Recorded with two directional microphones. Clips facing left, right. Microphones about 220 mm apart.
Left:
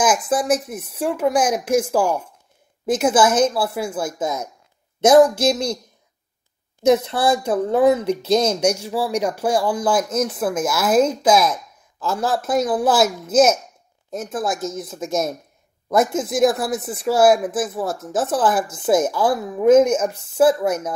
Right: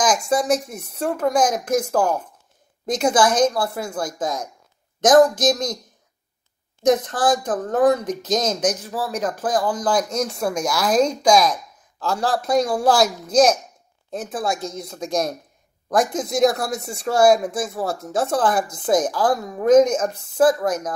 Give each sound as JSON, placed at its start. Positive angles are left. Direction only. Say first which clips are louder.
{"t": 0.0, "sound": "speech", "louder": "left 1 dB", "side_deg": 5}
{"t": 7.2, "sound": "speech", "louder": "left 2 dB", "side_deg": 10}